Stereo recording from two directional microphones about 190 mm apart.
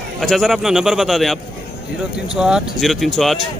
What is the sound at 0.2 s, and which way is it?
A man's voice, centre (ahead or behind).